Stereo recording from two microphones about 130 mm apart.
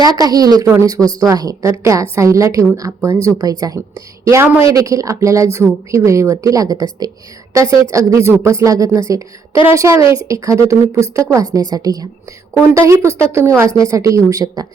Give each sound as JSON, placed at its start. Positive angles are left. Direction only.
{"t": 0.2, "sound": "a woman's voice", "side_deg": -30}